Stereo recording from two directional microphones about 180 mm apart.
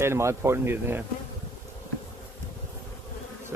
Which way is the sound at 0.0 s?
15° right (ahead or behind).